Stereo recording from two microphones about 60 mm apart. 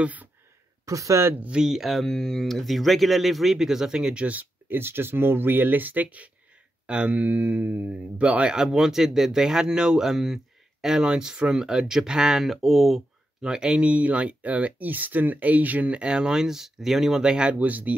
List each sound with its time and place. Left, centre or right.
0.0 s speech: right
0.8 s speech: right
1.6 s speech: centre; by 4.5 s right
4.6 s speech: right; by 13.0 s centre
13.4 s speech: centre; by 17.9 s right